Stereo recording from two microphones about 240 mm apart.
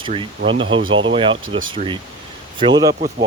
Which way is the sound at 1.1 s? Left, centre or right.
Right.